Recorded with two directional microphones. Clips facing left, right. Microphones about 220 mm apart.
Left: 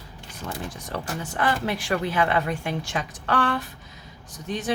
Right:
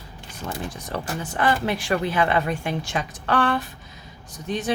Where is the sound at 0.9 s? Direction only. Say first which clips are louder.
Right 1 dB; 25° right (ahead or behind).